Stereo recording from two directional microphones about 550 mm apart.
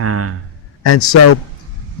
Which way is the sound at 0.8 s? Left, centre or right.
Left.